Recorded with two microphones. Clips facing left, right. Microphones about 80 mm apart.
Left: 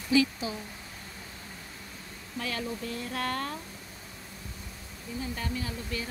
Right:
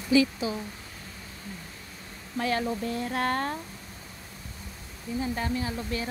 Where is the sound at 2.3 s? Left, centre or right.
Right.